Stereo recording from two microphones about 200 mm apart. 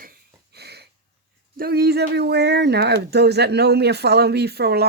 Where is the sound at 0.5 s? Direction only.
55° right (ahead or behind).